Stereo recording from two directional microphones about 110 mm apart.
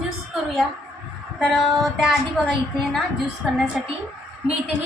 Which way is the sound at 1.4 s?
Centre (ahead or behind).